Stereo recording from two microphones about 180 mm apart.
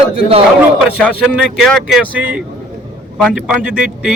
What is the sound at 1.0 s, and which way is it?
A man's voice, 5° left (ahead or behind).